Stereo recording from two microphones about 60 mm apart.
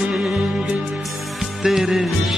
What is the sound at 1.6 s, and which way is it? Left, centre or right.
Music, centre.